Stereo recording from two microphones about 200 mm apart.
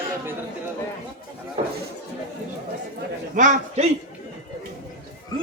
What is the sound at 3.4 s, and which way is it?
Speech, 35° right (ahead or behind).